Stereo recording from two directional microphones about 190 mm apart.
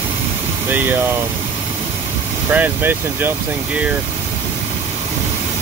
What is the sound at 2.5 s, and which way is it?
Speech, 10° right (ahead or behind).